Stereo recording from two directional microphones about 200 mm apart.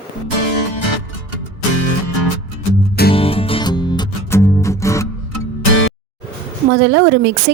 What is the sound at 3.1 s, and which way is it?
Music, 30° left (ahead or behind).